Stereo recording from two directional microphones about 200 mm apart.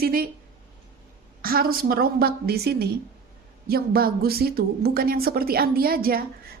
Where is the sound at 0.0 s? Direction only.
45° right (ahead or behind).